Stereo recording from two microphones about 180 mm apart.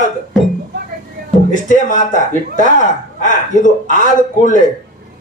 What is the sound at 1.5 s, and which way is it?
Speech, 45° left (ahead or behind).